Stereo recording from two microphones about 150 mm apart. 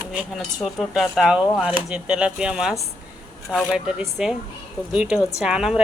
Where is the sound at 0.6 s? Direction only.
Centre (ahead or behind).